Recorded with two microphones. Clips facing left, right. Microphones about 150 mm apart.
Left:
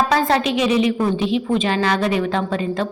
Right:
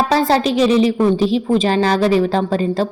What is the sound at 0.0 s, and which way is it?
A woman's voice, 35° right (ahead or behind).